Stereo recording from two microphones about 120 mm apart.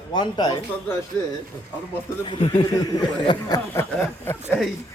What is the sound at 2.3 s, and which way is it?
Speech, 45° left (ahead or behind).